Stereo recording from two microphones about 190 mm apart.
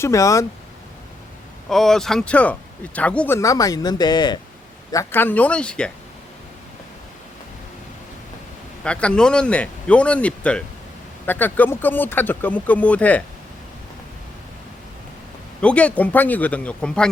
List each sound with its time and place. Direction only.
0.0 s speech: 15° left (ahead or behind)
1.7 s speech: centre (ahead or behind)
8.8 s speech: 5° left (ahead or behind)
15.6 s speech: 5° left (ahead or behind)